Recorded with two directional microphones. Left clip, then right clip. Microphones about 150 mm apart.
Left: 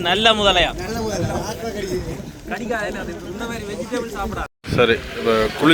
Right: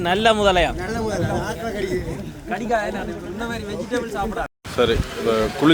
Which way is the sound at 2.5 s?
90° right.